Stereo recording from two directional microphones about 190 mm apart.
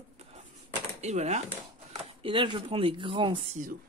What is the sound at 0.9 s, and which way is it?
Speech, 35° right (ahead or behind).